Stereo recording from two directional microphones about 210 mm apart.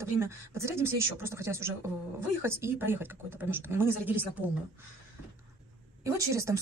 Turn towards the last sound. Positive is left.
turn(degrees=-15)  # may be behind; listen again after turning